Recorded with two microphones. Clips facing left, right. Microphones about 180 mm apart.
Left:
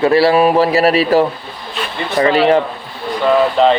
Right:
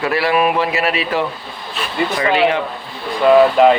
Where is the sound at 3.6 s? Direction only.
5° right (ahead or behind).